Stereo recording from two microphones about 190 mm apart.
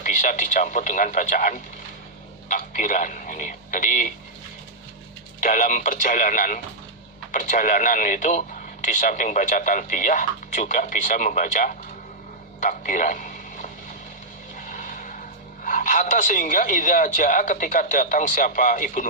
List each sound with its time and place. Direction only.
0.0 s speech: 45° left (ahead or behind)
5.4 s a man's voice: 45° left (ahead or behind)
14.6 s vehicle: 45° left (ahead or behind)
15.6 s speech: 45° left (ahead or behind)